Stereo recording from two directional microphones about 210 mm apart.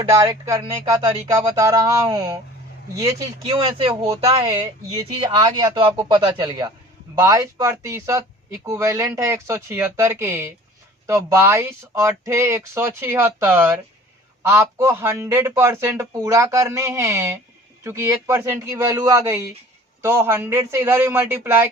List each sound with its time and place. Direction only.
0.0 s a man's voice: 15° right (ahead or behind)